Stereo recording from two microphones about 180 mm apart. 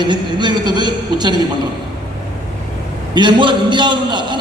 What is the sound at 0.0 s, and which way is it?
A man's voice, 25° right (ahead or behind).